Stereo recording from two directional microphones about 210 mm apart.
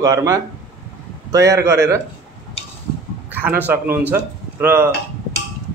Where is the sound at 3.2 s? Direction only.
10° right (ahead or behind).